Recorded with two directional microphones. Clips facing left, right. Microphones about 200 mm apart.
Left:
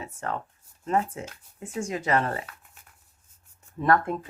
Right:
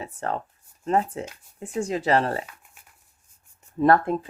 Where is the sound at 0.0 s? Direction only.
35° right (ahead or behind).